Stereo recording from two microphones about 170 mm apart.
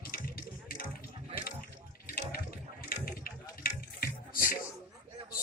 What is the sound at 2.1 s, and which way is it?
Water, 60° left (ahead or behind).